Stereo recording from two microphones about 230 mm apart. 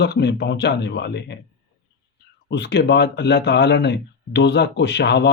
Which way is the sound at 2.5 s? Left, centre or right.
Left.